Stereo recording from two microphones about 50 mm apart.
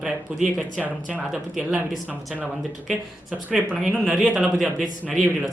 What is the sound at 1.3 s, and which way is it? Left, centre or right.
Speech, centre.